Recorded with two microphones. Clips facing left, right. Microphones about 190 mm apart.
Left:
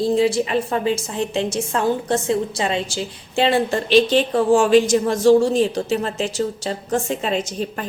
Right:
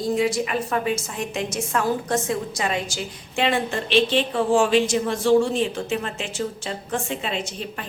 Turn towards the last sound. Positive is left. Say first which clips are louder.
# left 6 dB
turn(degrees=40)  # may be behind; listen again after turning